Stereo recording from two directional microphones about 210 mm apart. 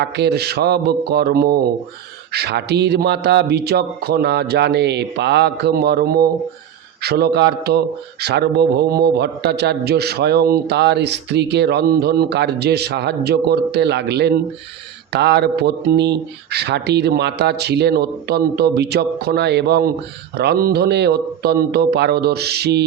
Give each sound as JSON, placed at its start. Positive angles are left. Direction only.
{"t": 0.0, "sound": "a man's voice", "side_deg": -55}